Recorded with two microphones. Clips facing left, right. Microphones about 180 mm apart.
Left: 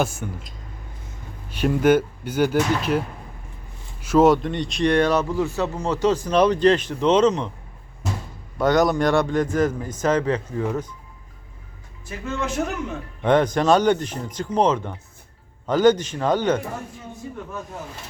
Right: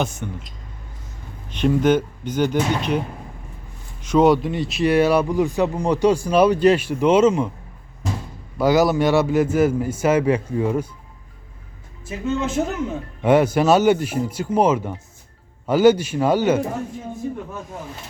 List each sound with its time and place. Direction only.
0.0 s speech: 5° left (ahead or behind)
1.5 s speech: 5° left (ahead or behind)
4.0 s speech: 5° left (ahead or behind)
8.5 s speech: centre (ahead or behind)
12.3 s a man's voice: 25° right (ahead or behind)
13.2 s speech: 10° right (ahead or behind)